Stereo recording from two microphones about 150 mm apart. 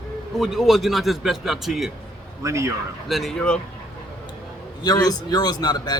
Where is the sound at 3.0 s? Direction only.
Centre (ahead or behind).